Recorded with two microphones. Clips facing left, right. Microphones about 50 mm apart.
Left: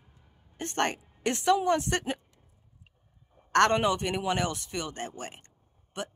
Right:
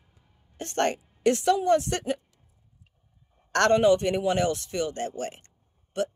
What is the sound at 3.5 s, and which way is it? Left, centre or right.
A woman's voice, centre.